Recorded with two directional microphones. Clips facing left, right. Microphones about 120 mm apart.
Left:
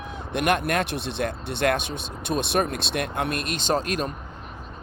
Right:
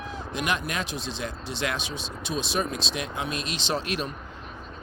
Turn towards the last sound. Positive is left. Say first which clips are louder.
# left 4 dB
turn(degrees=45)  # may be behind; listen again after turning